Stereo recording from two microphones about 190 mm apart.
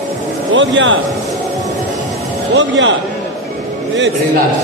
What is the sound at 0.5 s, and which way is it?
Speech, 75° right (ahead or behind).